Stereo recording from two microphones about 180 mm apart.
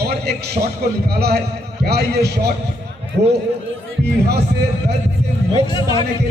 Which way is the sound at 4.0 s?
65° right (ahead or behind).